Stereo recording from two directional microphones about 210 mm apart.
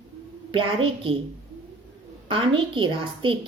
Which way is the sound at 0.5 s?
25° right (ahead or behind).